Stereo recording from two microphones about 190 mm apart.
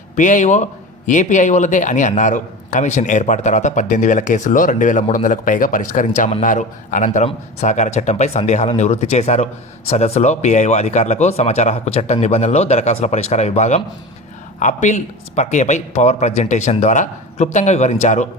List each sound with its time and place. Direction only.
0.2 s a man's voice: 40° left (ahead or behind)